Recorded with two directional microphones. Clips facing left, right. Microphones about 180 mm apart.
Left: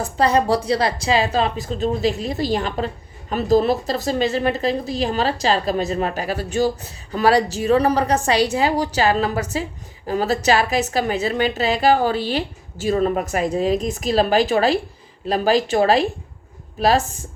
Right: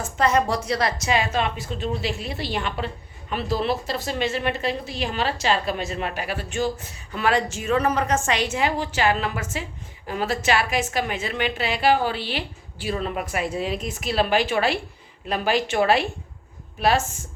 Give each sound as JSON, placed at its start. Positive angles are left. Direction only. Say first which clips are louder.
{"t": 0.0, "sound": "a woman's voice", "louder": "left 3 dB", "side_deg": 35}